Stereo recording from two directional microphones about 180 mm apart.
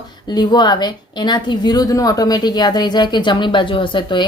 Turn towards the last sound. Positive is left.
turn(degrees=25)  # may be behind; listen again after turning